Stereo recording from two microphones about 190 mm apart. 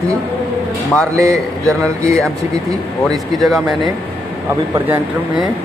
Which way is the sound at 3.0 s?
Centre (ahead or behind).